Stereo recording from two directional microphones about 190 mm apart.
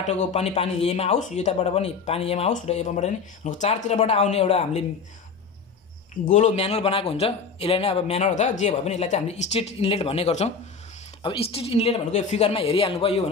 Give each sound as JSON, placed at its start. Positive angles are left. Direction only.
{"t": 0.0, "sound": "a man's voice", "side_deg": 35}
{"t": 6.2, "sound": "a man's voice", "side_deg": 40}